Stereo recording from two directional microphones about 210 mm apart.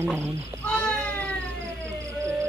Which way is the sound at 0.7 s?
5° left (ahead or behind).